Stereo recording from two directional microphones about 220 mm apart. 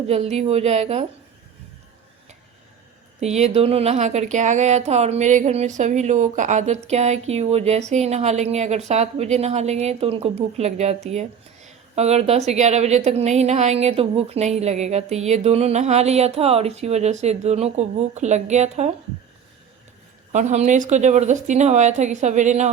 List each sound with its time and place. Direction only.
0.1 s a woman's voice: 30° right (ahead or behind)
3.2 s a woman's voice: 30° right (ahead or behind)
20.3 s speech: 35° right (ahead or behind)